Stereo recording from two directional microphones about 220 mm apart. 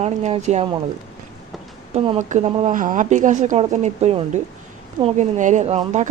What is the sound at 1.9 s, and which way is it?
Speech, 25° right (ahead or behind).